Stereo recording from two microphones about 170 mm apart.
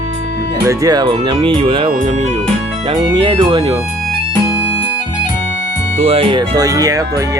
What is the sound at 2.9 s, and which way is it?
Speech, 25° right (ahead or behind).